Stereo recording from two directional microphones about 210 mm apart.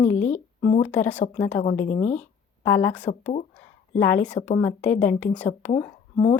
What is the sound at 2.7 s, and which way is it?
A woman's voice, 10° left (ahead or behind).